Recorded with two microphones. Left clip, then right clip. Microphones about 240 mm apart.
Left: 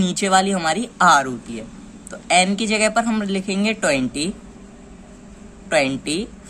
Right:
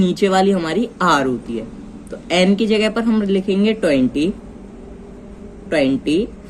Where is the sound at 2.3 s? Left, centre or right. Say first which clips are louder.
Right 1 dB; left.